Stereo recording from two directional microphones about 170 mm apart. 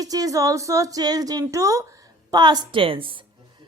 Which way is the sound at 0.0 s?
20° right (ahead or behind).